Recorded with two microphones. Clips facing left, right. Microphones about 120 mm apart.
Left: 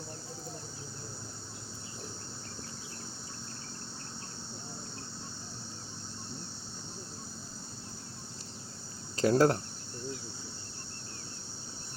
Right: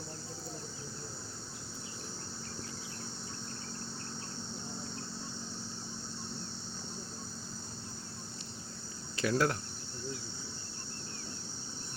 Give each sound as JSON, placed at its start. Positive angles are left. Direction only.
{"t": 9.1, "sound": "speech", "side_deg": 35}